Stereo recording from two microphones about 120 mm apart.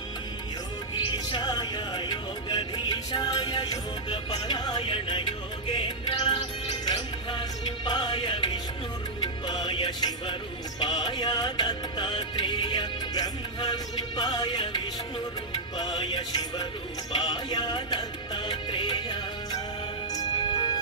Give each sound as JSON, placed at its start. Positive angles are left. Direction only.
{"t": 0.9, "sound": "music", "side_deg": 40}